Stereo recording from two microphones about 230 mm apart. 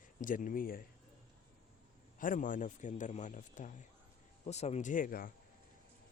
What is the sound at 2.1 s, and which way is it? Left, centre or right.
A man's voice, left.